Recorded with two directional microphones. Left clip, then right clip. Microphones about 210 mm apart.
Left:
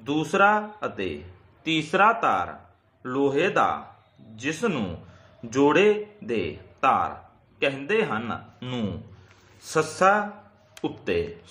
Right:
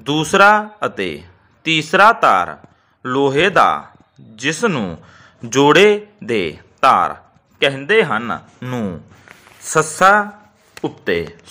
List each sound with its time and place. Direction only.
0.0 s a man's voice: 35° right (ahead or behind)
9.7 s speech: 45° right (ahead or behind)
10.8 s a man's voice: 35° right (ahead or behind)